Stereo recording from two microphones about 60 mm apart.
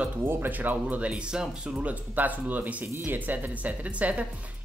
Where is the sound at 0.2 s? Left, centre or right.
Right; by 1.8 s centre.